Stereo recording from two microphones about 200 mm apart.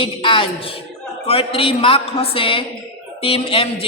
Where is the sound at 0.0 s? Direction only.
25° left (ahead or behind).